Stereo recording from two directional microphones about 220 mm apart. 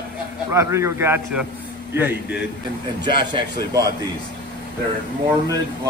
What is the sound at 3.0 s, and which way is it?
Speech, 20° right (ahead or behind).